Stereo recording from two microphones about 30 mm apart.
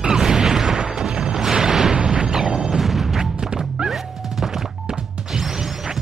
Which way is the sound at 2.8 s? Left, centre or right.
Centre.